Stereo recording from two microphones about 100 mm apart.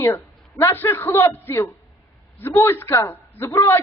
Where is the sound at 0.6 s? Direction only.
20° left (ahead or behind).